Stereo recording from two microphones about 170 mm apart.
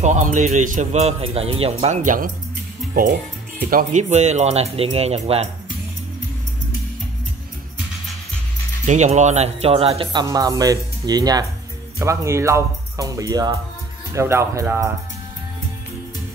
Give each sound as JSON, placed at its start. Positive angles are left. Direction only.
{"t": 0.0, "sound": "a man's voice", "side_deg": -45}
{"t": 8.8, "sound": "speech", "side_deg": -45}
{"t": 10.2, "sound": "speech", "side_deg": -20}